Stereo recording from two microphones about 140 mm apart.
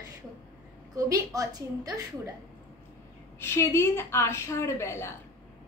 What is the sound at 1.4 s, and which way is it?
Speech, 25° right (ahead or behind).